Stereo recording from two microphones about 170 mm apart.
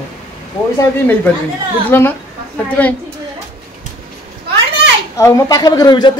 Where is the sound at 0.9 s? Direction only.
10° left (ahead or behind).